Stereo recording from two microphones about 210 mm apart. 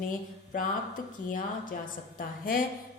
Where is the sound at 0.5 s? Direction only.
40° left (ahead or behind).